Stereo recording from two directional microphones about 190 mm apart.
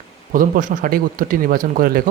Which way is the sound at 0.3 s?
45° right (ahead or behind).